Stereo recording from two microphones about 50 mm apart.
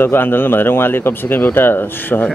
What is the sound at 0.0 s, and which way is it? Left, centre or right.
Speech, left.